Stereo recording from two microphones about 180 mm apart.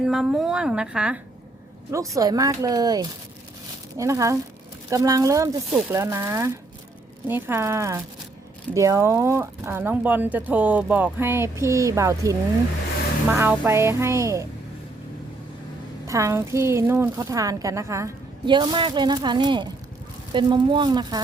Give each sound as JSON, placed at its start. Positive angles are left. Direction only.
{"t": 0.0, "sound": "a woman's voice", "side_deg": -5}
{"t": 1.9, "sound": "speech", "side_deg": -15}
{"t": 16.0, "sound": "speech", "side_deg": -15}